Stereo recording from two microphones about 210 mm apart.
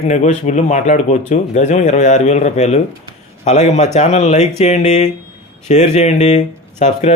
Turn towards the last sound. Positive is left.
turn(degrees=35)  # may be behind; listen again after turning